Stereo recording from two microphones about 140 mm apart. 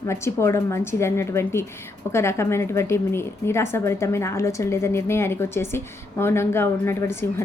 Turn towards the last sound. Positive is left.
turn(degrees=15)  # may be behind; listen again after turning